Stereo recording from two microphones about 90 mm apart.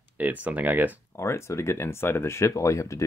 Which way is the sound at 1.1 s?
30° left (ahead or behind).